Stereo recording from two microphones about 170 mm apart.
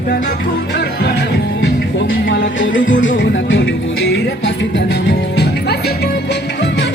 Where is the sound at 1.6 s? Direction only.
90° left.